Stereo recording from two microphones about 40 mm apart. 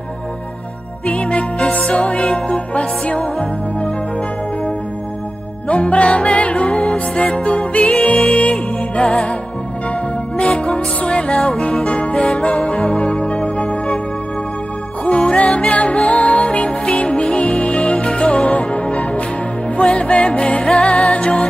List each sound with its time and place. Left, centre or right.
1.0 s music: left
5.7 s music: left
15.0 s music: left